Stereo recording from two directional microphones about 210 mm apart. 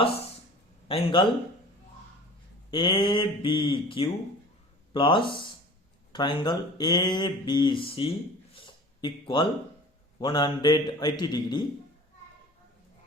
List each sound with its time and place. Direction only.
0.9 s speech: 25° left (ahead or behind)
2.6 s speech: 25° left (ahead or behind)
8.5 s a sound: 20° left (ahead or behind)
10.2 s speech: 20° left (ahead or behind)